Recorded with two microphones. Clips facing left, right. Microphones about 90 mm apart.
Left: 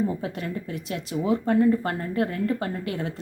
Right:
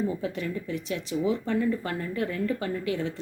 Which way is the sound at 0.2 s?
45° left (ahead or behind).